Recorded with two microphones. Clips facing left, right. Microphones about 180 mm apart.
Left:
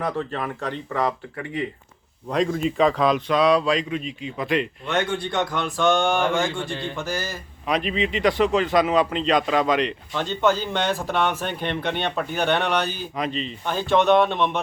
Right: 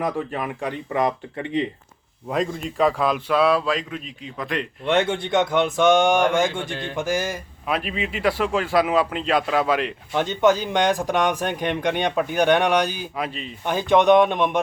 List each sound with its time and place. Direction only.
0.0 s speech: 10° right (ahead or behind)
2.3 s a man's voice: centre (ahead or behind)
4.9 s speech: 25° right (ahead or behind)
6.7 s a man's voice: centre (ahead or behind)
6.9 s speech: 15° right (ahead or behind)
7.7 s a man's voice: 5° right (ahead or behind)